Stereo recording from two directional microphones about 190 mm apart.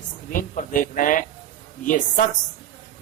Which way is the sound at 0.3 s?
45° left (ahead or behind).